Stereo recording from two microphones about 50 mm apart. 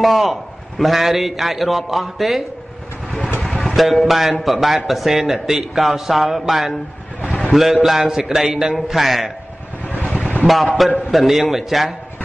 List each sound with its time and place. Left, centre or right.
0.0 s a man's voice: centre
3.4 s a man's voice: centre
10.1 s boat: left
10.4 s a man's voice: centre